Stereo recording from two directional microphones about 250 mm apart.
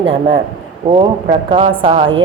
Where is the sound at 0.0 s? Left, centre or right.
Right.